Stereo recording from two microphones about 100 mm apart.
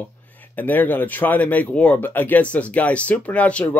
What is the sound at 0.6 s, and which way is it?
Speech, 20° left (ahead or behind).